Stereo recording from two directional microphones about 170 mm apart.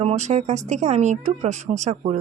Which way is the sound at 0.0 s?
40° right (ahead or behind).